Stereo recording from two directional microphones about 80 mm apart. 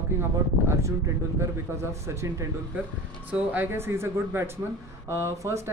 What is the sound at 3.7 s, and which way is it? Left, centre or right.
A man's voice, right.